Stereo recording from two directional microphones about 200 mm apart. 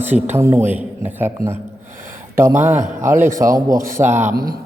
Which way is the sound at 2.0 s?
10° right (ahead or behind).